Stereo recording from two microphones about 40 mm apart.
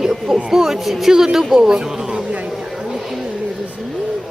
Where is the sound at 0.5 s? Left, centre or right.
Centre.